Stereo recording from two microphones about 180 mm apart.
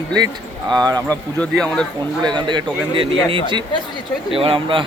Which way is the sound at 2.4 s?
25° right (ahead or behind).